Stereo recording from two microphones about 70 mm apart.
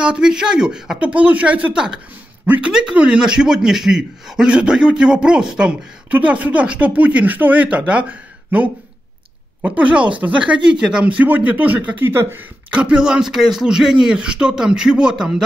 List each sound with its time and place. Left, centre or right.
0.0 s speech: centre
2.4 s speech: right
2.7 s speech: centre
12.1 s speech: right
12.7 s speech: centre